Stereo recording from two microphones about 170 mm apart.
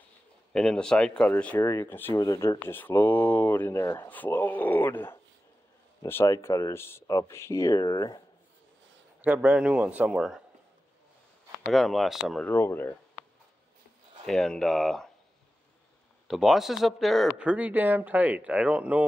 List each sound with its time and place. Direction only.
0.5 s speech: 5° left (ahead or behind); by 8.2 s 25° left (ahead or behind)
9.2 s speech: 10° right (ahead or behind)
11.7 s speech: centre (ahead or behind)
12.4 s speech: 15° left (ahead or behind)
14.2 s speech: centre (ahead or behind)
16.3 s speech: centre (ahead or behind)